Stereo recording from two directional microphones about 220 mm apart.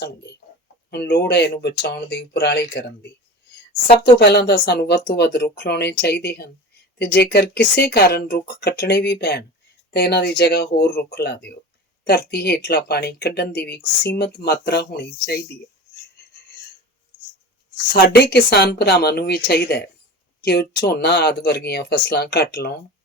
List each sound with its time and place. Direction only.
0.9 s speech: 45° left (ahead or behind)
4.2 s speech: 50° left (ahead or behind)
17.9 s speech: 45° left (ahead or behind)